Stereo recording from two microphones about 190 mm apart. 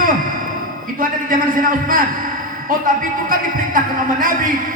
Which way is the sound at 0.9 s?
45° right (ahead or behind).